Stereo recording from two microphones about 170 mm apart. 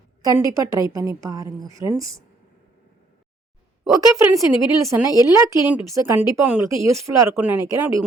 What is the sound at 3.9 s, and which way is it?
Speech, 20° right (ahead or behind).